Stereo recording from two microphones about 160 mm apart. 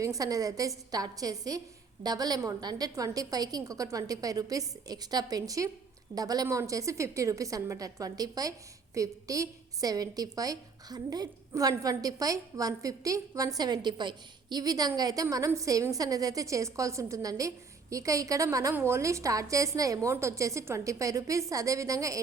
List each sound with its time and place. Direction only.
0.0 s a woman's voice: 20° right (ahead or behind)